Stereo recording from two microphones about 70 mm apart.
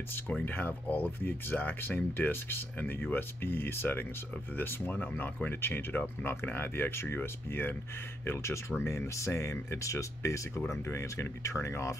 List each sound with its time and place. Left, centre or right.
0.5 s speech: left